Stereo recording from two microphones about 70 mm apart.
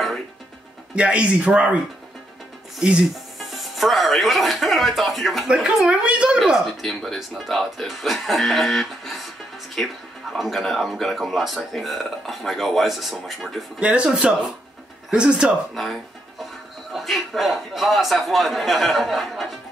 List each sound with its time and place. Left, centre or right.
0.9 s speech: centre
2.8 s speech: centre
3.3 s speech: centre
6.6 s speech: centre
13.7 s speech: centre
15.7 s music: centre
16.9 s speech: centre